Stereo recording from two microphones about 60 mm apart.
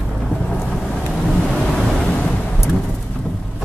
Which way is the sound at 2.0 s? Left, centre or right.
Centre.